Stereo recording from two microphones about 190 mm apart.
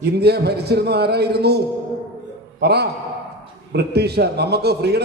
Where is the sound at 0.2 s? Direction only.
60° right (ahead or behind).